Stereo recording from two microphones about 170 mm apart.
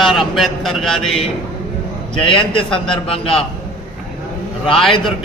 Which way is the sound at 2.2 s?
30° left (ahead or behind).